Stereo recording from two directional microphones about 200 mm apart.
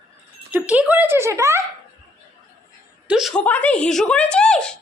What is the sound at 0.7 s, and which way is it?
Speech, 5° right (ahead or behind).